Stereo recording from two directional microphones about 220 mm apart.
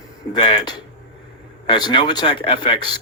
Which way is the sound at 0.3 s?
20° left (ahead or behind).